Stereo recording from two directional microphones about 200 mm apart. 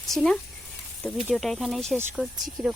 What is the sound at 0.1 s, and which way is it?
Speech, centre (ahead or behind).